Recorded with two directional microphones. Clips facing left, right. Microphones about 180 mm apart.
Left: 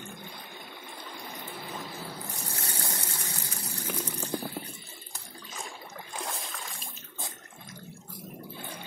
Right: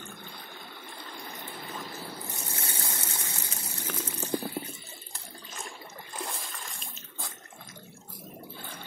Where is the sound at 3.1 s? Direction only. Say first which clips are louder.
Even; 20° right (ahead or behind).